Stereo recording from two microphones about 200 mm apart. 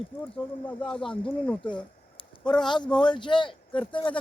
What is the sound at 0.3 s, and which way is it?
Speech, 5° left (ahead or behind).